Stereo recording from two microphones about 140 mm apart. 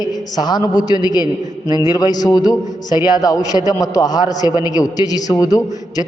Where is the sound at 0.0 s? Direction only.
30° left (ahead or behind).